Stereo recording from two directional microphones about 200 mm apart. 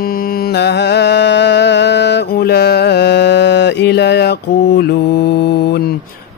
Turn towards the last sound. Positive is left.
turn(degrees=55)  # may be behind; listen again after turning